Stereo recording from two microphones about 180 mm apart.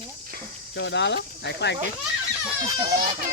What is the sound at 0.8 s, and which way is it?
Speech, 75° left (ahead or behind).